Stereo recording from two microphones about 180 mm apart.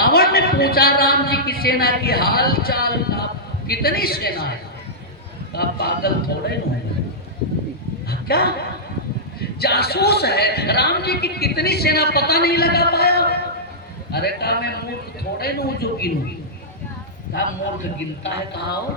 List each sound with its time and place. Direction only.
0.0 s a man's voice: 55° left (ahead or behind)
5.5 s a man's voice: 65° left (ahead or behind)
8.1 s a sound: 60° left (ahead or behind)
9.4 s a man's voice: 60° left (ahead or behind)
18.2 s a man's voice: 70° left (ahead or behind)